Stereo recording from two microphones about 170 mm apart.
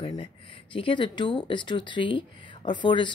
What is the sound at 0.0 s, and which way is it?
Speech, 30° left (ahead or behind).